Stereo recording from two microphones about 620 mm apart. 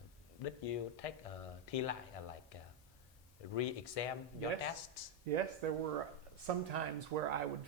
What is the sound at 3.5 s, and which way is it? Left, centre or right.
Speech, left.